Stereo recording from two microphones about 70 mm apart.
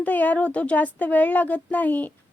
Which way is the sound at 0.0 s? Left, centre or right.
Left.